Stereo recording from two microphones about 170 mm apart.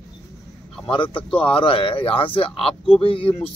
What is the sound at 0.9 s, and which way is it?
Speech, 30° left (ahead or behind).